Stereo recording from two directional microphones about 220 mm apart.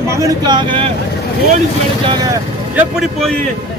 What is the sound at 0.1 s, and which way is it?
Speech, 15° right (ahead or behind).